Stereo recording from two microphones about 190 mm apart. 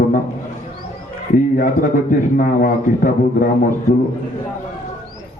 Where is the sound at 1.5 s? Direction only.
45° left (ahead or behind).